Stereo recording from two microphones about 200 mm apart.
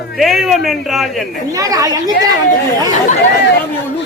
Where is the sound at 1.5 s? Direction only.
15° right (ahead or behind).